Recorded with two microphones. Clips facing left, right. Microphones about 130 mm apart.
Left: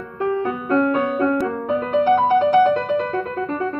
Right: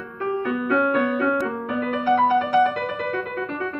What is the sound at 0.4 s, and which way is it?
Music, 35° left (ahead or behind).